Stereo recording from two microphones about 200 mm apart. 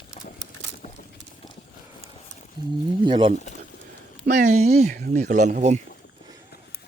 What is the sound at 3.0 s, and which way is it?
Speech, 25° right (ahead or behind).